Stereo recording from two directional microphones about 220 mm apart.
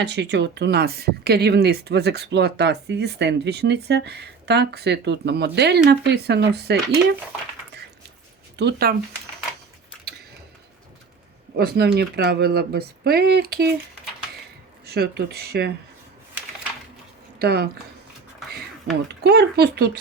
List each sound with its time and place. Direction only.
0.0 s speech: 50° right (ahead or behind)
8.5 s speech: 45° right (ahead or behind)
11.5 s speech: 45° right (ahead or behind)
14.8 s speech: 45° right (ahead or behind)
17.4 s speech: 45° right (ahead or behind)
18.4 s a sound: centre (ahead or behind)
19.2 s speech: 45° right (ahead or behind)